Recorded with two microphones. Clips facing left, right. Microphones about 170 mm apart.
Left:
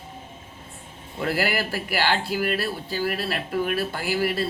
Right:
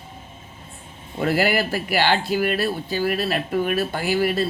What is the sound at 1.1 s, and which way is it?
Speech, 20° right (ahead or behind).